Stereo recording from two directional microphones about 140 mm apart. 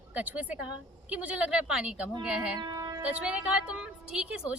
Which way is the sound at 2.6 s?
30° right (ahead or behind).